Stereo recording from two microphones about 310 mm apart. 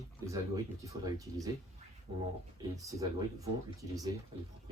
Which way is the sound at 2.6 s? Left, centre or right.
Centre.